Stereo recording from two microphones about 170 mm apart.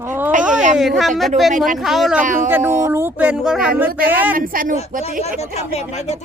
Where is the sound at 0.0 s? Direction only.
10° right (ahead or behind).